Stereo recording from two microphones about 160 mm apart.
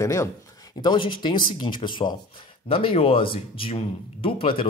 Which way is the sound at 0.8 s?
30° left (ahead or behind).